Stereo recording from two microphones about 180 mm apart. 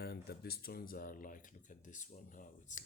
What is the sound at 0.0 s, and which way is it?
Speech, 60° left (ahead or behind).